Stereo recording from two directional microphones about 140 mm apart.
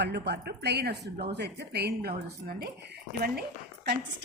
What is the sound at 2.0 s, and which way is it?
A woman's voice, 90° right.